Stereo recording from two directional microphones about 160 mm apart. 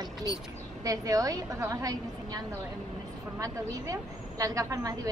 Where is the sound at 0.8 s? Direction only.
20° right (ahead or behind).